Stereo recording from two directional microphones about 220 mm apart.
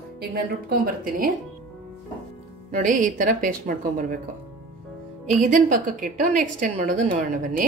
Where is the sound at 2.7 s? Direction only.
35° right (ahead or behind).